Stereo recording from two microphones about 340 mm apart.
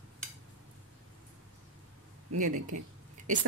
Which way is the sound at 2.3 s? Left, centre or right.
Right.